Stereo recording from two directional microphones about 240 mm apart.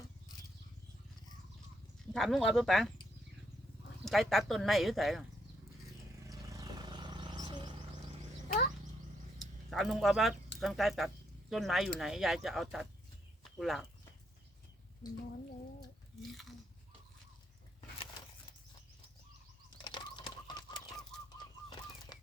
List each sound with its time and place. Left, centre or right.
2.1 s speech: centre
4.0 s speech: centre
6.2 s vehicle: centre
9.6 s speech: centre
19.8 s a sound: centre
22.1 s a sound: centre